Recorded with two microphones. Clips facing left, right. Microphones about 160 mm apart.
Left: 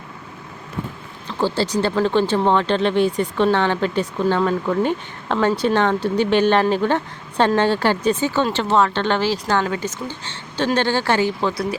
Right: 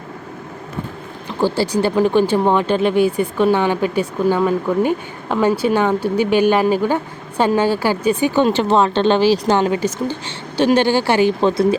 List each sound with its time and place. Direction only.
1.3 s speech: 15° right (ahead or behind)